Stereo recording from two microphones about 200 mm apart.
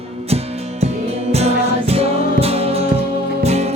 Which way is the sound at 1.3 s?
30° right (ahead or behind).